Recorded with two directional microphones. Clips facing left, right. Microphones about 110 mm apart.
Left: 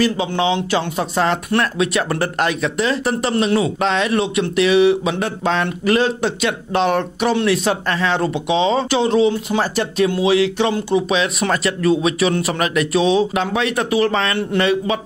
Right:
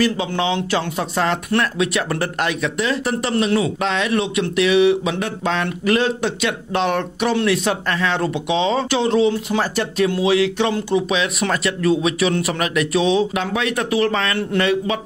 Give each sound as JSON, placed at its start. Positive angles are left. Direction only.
{"t": 0.0, "sound": "speech", "side_deg": 20}